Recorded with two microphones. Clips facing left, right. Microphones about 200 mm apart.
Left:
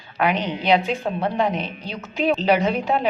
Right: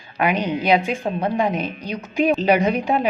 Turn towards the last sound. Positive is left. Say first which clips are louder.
# right 2 dB
turn(degrees=-15)  # may be behind; listen again after turning